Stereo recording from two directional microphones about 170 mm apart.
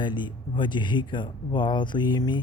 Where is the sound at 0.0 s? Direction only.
25° left (ahead or behind).